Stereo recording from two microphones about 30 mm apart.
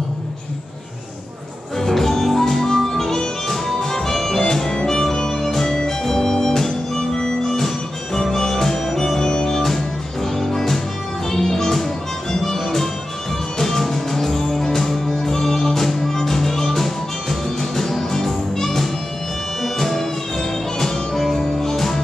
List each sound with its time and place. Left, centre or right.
1.8 s music: centre
7.5 s music: centre